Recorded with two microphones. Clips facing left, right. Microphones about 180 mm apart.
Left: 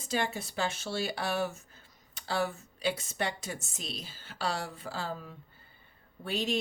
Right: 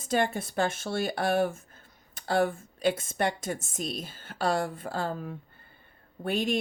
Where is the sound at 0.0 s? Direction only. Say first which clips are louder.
Right 5 dB; 50° right (ahead or behind).